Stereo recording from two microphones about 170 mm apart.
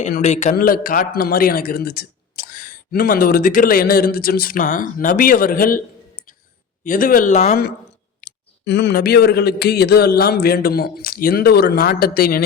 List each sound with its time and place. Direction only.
0.2 s a man's voice: 40° left (ahead or behind)
0.5 s speech: 60° left (ahead or behind)
6.8 s speech: 55° left (ahead or behind)
8.2 s speech: 85° left; by 12.4 s 60° left (ahead or behind)